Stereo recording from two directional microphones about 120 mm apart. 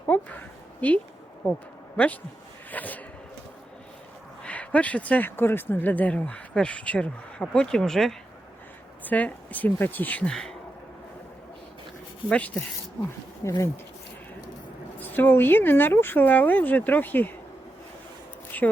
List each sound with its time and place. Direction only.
0.8 s speech: 15° left (ahead or behind)
2.0 s speech: 15° left (ahead or behind)
4.4 s speech: 10° left (ahead or behind)
12.3 s speech: 10° left (ahead or behind)
13.4 s speech: 25° left (ahead or behind)
14.9 s speech: 15° left (ahead or behind)
18.5 s speech: 15° left (ahead or behind)